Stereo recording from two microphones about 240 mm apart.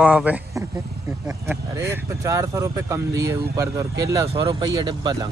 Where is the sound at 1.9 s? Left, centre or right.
Centre.